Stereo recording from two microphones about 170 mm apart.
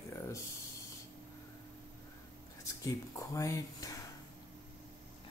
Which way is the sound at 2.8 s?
20° left (ahead or behind).